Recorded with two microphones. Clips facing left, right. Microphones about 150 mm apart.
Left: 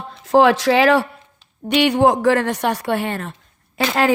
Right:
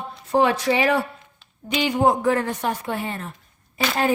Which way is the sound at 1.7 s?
70° left (ahead or behind).